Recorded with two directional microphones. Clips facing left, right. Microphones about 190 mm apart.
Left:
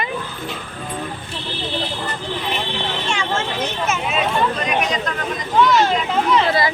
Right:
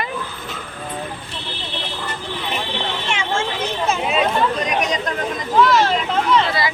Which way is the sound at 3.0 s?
25° right (ahead or behind).